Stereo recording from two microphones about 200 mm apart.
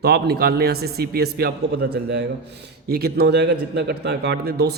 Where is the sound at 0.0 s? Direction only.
55° right (ahead or behind).